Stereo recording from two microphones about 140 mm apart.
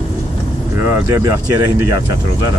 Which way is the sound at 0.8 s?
20° right (ahead or behind).